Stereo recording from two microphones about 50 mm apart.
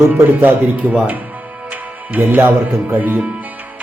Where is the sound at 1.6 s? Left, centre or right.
Right.